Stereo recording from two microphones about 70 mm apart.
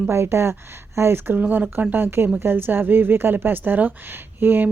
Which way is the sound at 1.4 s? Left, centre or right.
Right.